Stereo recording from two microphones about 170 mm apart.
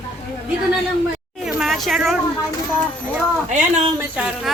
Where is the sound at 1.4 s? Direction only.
Centre (ahead or behind).